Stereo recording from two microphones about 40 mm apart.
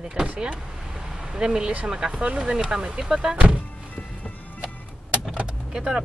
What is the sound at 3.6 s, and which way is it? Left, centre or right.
Music, left.